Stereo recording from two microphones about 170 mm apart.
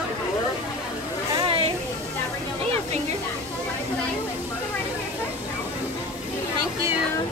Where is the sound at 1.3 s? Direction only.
30° right (ahead or behind).